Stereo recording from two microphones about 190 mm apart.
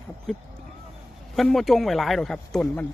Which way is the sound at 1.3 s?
Centre (ahead or behind).